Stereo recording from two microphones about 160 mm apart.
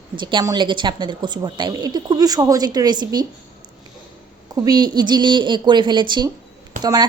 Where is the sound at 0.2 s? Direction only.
30° right (ahead or behind).